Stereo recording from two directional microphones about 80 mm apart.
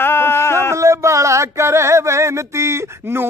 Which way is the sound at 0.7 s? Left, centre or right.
Right.